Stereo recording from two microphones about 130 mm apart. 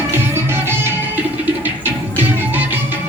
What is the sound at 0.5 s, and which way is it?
Music, 15° right (ahead or behind).